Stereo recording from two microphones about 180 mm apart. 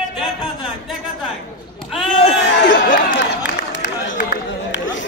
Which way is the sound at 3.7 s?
85° left.